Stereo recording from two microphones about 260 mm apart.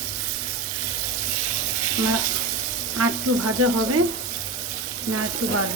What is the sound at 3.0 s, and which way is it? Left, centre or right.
Speech, right.